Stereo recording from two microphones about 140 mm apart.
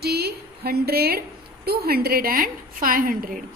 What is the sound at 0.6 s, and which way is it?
A woman's voice, 90° right.